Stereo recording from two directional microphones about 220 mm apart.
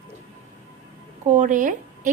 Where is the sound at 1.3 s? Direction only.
35° right (ahead or behind).